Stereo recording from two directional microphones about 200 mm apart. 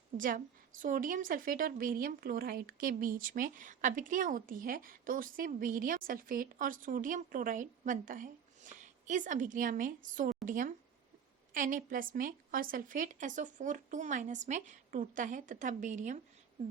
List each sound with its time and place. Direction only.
0.2 s a woman's voice: 40° right (ahead or behind)